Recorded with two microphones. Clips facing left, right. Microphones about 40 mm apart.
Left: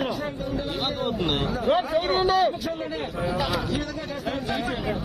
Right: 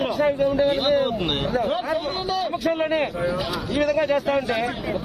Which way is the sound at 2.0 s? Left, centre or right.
Left.